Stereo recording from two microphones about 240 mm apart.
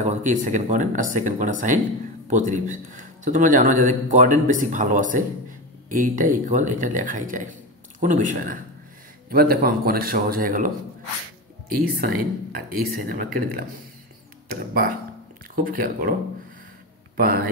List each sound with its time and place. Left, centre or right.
0.0 s a man's voice: right
12.0 s a man's voice: right
14.5 s a man's voice: right
17.2 s a man's voice: right